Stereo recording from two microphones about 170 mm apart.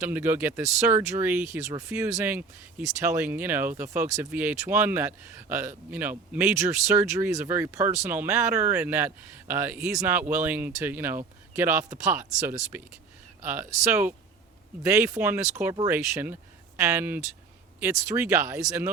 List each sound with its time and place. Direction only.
0.0 s speech: 10° right (ahead or behind)